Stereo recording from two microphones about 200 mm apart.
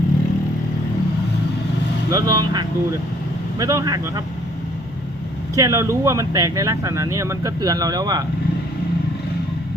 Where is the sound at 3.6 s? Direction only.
15° right (ahead or behind).